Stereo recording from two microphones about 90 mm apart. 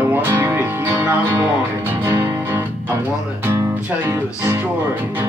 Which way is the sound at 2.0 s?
35° right (ahead or behind).